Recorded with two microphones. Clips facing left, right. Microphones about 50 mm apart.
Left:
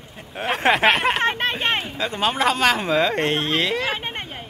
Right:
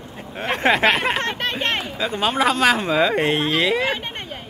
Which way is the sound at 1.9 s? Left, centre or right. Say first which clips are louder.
Right 1 dB; centre.